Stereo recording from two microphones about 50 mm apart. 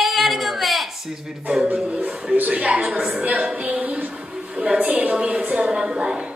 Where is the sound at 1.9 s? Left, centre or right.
Right.